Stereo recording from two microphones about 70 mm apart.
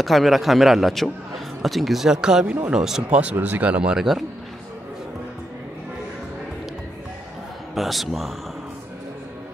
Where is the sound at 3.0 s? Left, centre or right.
Centre.